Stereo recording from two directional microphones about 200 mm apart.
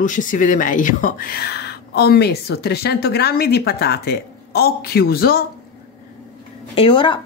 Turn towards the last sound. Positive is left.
turn(degrees=25)  # may be behind; listen again after turning